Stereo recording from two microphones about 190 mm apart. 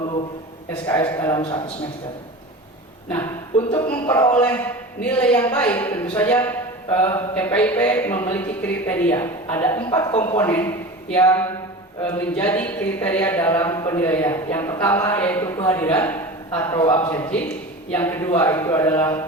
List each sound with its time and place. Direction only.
1.0 s a man's voice: 15° left (ahead or behind)
1.4 s a man's voice: 30° left (ahead or behind)
3.7 s speech: 25° left (ahead or behind)
4.0 s a man's voice: 15° left (ahead or behind)
16.8 s speech: 25° left (ahead or behind)
17.1 s a man's voice: 10° left (ahead or behind)